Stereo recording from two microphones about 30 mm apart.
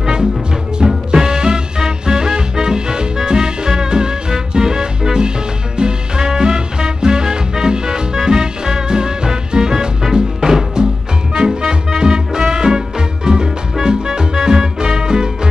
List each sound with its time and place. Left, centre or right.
0.0 s music: right